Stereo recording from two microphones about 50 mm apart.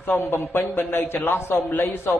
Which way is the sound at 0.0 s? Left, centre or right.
Left.